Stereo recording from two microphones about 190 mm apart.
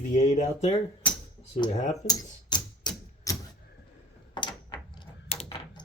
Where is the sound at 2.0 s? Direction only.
20° left (ahead or behind).